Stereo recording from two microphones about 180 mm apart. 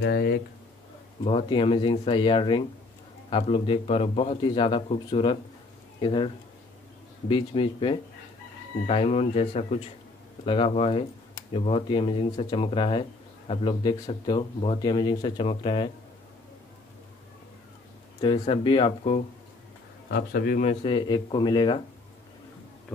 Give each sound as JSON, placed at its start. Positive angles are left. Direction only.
{"t": 0.0, "sound": "a man's voice", "side_deg": 60}
{"t": 1.2, "sound": "a man's voice", "side_deg": 30}
{"t": 18.2, "sound": "speech", "side_deg": 30}
{"t": 20.1, "sound": "a man's voice", "side_deg": 65}
{"t": 20.8, "sound": "speech", "side_deg": 25}